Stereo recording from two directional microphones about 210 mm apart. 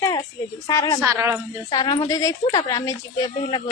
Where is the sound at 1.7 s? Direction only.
20° left (ahead or behind).